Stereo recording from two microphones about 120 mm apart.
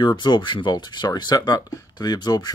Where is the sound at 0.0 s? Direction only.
40° left (ahead or behind).